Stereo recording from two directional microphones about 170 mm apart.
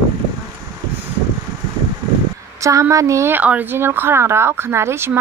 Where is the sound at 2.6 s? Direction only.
20° right (ahead or behind).